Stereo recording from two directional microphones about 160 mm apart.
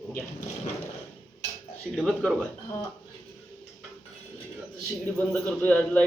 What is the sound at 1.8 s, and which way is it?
Speech, centre (ahead or behind).